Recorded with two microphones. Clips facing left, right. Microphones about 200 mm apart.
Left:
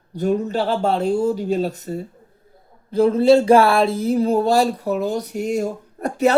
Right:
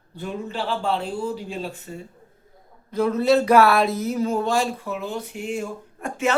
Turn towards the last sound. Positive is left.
turn(degrees=35)  # may be behind; listen again after turning